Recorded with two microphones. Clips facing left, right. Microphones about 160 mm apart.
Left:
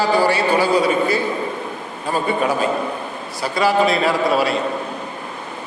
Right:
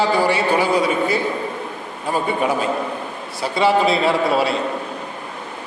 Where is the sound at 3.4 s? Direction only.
25° right (ahead or behind).